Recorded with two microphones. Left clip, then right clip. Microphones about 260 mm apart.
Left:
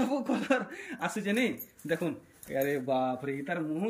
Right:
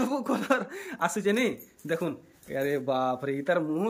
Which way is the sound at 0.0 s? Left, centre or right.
Centre.